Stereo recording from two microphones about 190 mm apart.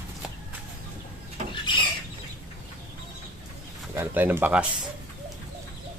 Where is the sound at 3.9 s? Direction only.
10° right (ahead or behind).